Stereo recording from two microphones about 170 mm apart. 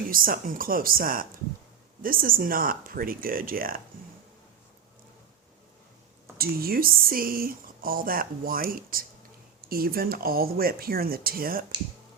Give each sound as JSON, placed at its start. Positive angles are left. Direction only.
{"t": 0.1, "sound": "speech", "side_deg": -55}
{"t": 6.3, "sound": "speech", "side_deg": -60}